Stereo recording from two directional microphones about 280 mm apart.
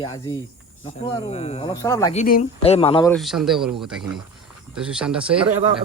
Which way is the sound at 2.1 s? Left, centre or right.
Left.